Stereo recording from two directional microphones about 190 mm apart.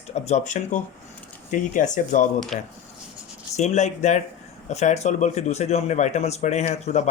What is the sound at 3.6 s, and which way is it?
Speech, 35° left (ahead or behind).